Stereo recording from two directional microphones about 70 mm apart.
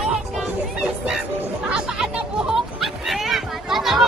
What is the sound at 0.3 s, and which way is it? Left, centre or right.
Music, centre.